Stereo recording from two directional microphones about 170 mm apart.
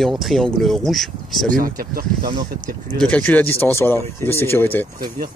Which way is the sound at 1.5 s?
55° right (ahead or behind).